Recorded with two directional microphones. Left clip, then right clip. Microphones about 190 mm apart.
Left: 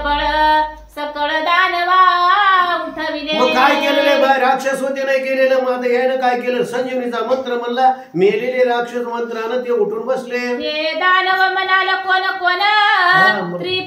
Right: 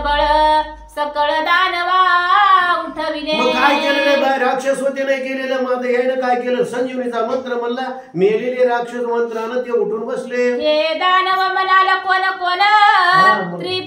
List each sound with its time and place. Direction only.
0.1 s music: 20° right (ahead or behind)
1.2 s female singing: 20° right (ahead or behind)
3.3 s a sound: 15° left (ahead or behind)
5.0 s a man's voice: 15° left (ahead or behind)
8.2 s a man's voice: 15° left (ahead or behind)
10.7 s singing: 20° right (ahead or behind)